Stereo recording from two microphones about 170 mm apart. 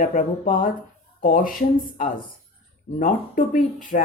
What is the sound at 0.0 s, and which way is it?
Speech, 55° left (ahead or behind).